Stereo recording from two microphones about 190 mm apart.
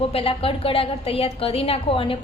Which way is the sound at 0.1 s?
30° left (ahead or behind).